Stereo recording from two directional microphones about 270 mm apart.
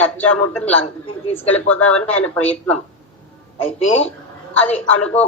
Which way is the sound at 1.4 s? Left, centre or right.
Centre.